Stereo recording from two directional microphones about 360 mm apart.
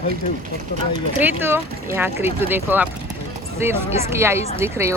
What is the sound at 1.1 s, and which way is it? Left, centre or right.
Speech, centre.